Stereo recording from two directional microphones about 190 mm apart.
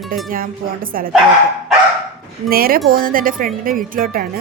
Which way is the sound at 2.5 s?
50° right (ahead or behind).